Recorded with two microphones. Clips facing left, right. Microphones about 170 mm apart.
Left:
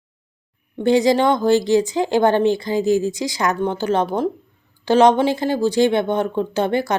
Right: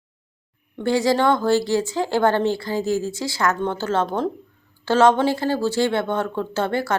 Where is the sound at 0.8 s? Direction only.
20° left (ahead or behind).